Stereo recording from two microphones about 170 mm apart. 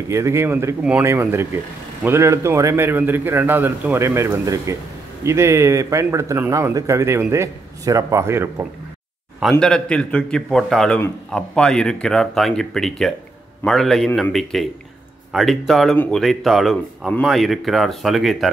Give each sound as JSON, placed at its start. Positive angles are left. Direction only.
{"t": 0.1, "sound": "speech", "side_deg": -15}
{"t": 9.4, "sound": "speech", "side_deg": 0}